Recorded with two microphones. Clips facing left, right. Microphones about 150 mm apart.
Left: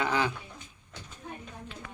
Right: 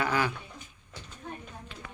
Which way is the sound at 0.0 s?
20° left (ahead or behind).